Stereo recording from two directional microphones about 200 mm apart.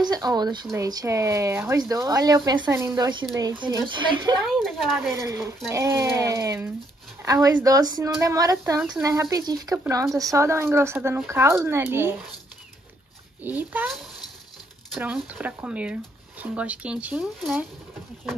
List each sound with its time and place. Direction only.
0.0 s speech: 20° right (ahead or behind)
4.5 s a woman's voice: centre (ahead or behind)
5.0 s speech: 15° right (ahead or behind)
13.4 s speech: 10° right (ahead or behind)